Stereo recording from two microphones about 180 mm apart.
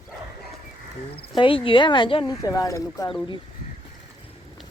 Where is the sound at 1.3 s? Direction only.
30° left (ahead or behind).